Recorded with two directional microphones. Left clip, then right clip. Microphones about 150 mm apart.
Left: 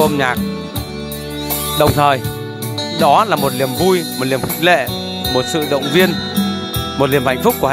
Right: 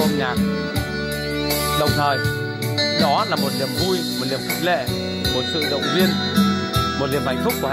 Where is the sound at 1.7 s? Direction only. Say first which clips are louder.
Left 9 dB; 35° left (ahead or behind).